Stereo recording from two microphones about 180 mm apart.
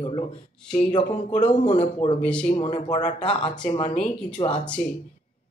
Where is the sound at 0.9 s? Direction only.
30° left (ahead or behind).